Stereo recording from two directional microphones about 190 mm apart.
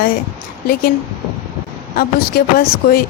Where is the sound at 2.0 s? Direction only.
50° left (ahead or behind).